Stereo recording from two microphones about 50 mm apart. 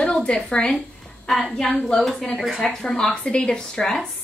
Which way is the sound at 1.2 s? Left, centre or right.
Centre.